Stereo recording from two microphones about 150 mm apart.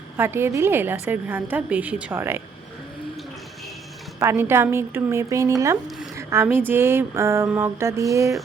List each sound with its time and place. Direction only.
0.2 s a woman's voice: 15° right (ahead or behind)
4.2 s a woman's voice: 15° right (ahead or behind)